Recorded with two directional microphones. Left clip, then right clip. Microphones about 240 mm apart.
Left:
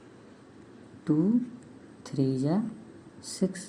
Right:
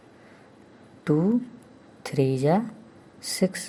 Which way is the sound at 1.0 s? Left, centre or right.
Right.